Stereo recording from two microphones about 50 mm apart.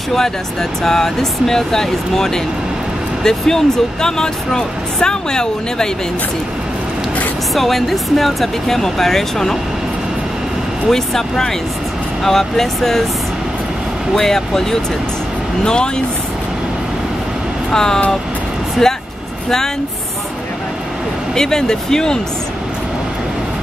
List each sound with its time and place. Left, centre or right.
0.1 s speech: centre
7.5 s speech: centre
10.9 s speech: centre
14.1 s speech: centre
17.6 s speech: centre
21.4 s speech: centre